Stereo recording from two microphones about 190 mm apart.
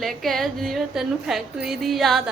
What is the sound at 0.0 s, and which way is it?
A woman's voice, centre (ahead or behind).